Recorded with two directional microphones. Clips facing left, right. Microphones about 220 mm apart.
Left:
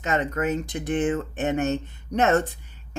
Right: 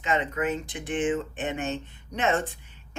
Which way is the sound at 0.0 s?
40° left (ahead or behind).